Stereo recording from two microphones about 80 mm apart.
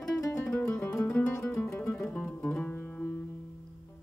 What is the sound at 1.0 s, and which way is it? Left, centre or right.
Music, centre.